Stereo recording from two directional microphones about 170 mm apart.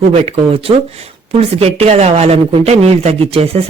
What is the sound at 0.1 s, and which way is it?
Speech, 35° right (ahead or behind).